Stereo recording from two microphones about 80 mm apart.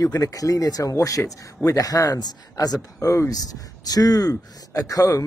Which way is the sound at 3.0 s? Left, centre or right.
Left.